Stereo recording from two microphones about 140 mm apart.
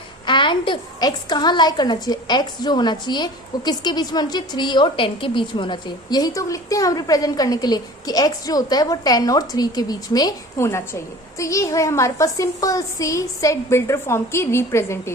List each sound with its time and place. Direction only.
0.3 s a woman's voice: 35° left (ahead or behind); by 15.1 s 20° left (ahead or behind)